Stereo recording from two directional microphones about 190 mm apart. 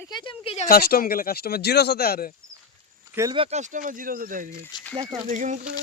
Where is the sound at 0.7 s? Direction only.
55° left (ahead or behind).